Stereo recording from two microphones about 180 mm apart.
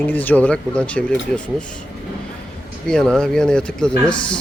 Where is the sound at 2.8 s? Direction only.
5° left (ahead or behind).